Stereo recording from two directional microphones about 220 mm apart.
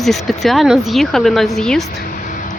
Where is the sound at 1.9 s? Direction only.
35° left (ahead or behind).